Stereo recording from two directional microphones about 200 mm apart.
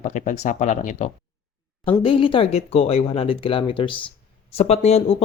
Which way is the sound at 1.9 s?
25° left (ahead or behind).